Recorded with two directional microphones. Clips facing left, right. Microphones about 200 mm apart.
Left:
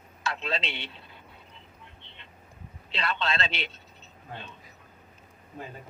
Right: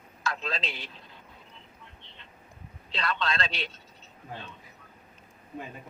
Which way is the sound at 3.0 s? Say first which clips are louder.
Even; 25° left (ahead or behind).